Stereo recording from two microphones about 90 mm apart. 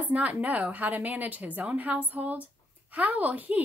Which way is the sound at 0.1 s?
15° right (ahead or behind).